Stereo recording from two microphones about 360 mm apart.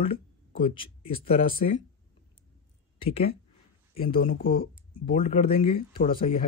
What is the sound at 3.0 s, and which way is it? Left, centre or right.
Speech, centre.